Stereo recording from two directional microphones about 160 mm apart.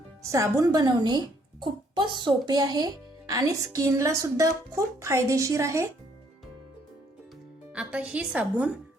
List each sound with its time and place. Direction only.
0.3 s speech: 20° right (ahead or behind)
7.7 s a woman's voice: 5° right (ahead or behind)